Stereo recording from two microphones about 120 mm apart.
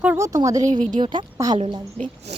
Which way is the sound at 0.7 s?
90° right.